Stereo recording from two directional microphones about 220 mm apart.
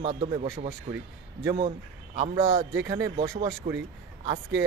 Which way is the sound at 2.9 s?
15° right (ahead or behind).